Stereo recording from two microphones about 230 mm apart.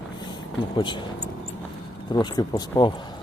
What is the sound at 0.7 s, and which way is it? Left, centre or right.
Speech, left.